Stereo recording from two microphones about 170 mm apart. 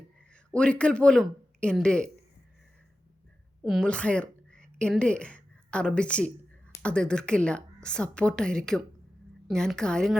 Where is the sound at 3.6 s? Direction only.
5° left (ahead or behind).